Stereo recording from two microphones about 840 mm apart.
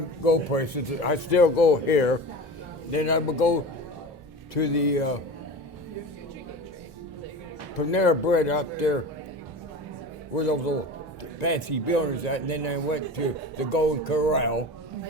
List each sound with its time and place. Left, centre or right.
0.3 s a man's voice: left
7.8 s speech: left
10.3 s a man's voice: left